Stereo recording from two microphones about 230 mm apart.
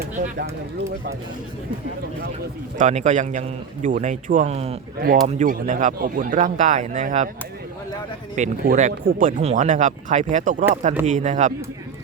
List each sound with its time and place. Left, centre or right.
0.0 s speech: right
2.7 s speech: right
8.4 s speech: right